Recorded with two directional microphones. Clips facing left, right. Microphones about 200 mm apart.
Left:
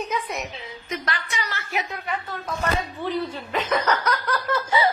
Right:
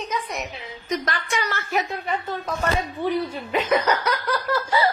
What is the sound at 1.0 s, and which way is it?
Speech, 45° right (ahead or behind).